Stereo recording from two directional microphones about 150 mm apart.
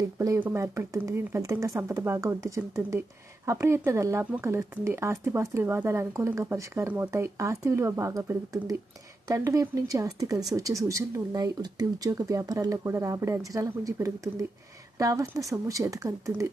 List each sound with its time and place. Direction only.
0.2 s speech: 15° right (ahead or behind)